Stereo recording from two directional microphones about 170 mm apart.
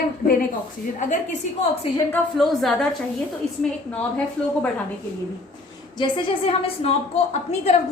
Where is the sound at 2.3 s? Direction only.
Centre (ahead or behind).